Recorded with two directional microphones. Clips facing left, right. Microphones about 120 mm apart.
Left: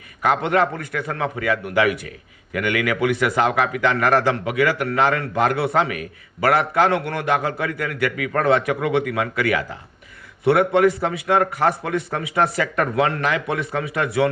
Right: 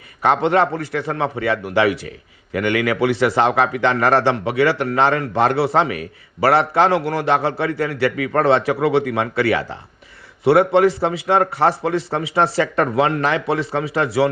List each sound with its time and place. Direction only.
0.2 s a man's voice: 30° right (ahead or behind)